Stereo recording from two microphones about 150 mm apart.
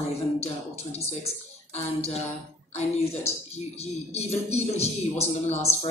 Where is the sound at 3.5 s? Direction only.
45° left (ahead or behind).